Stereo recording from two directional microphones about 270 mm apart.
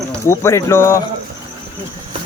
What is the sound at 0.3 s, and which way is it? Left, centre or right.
Speech, centre.